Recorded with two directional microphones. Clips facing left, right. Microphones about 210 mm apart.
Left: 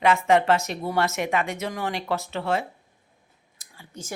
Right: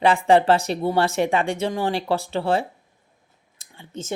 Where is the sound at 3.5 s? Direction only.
25° right (ahead or behind).